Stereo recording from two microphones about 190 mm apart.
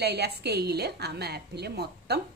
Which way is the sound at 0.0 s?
60° right (ahead or behind).